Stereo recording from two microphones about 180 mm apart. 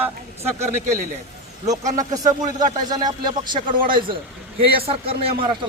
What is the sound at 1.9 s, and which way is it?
Speech, 20° right (ahead or behind).